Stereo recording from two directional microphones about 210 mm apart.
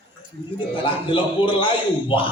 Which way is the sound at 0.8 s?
25° left (ahead or behind).